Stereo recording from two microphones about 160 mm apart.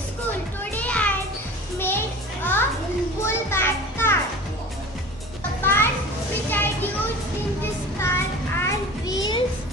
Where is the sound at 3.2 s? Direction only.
15° left (ahead or behind).